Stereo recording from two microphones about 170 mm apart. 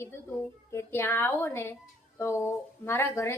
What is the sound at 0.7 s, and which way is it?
Speech, 15° left (ahead or behind).